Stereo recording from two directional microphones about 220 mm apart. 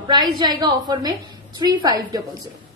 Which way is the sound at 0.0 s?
20° right (ahead or behind).